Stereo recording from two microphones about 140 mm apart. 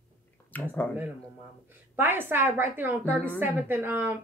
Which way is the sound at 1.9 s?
15° right (ahead or behind).